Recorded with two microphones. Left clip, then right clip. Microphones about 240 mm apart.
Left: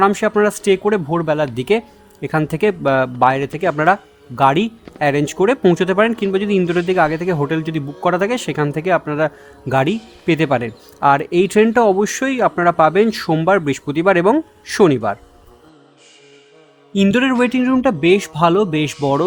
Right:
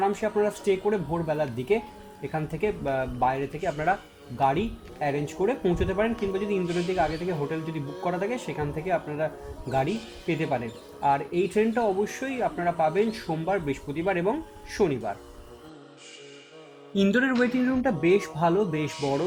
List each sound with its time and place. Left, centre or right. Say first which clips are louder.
0.0 s speech: left 11 dB; left
16.9 s speech: left 8 dB; centre